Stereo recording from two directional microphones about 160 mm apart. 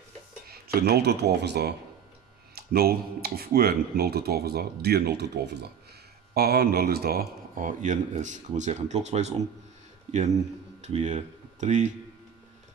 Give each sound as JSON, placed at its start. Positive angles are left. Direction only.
{"t": 0.5, "sound": "speech", "side_deg": -80}
{"t": 2.5, "sound": "speech", "side_deg": -75}
{"t": 6.3, "sound": "a man's voice", "side_deg": -75}
{"t": 10.8, "sound": "speech", "side_deg": -45}